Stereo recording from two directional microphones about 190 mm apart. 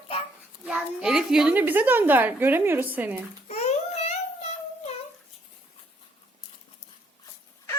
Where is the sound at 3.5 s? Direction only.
35° left (ahead or behind).